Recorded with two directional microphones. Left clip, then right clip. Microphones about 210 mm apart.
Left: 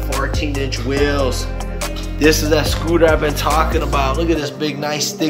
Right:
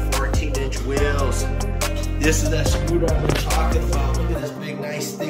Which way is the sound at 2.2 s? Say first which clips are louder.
Left 9 dB; 15° right (ahead or behind).